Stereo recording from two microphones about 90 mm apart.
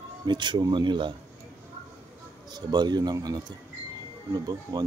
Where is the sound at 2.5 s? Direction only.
50° right (ahead or behind).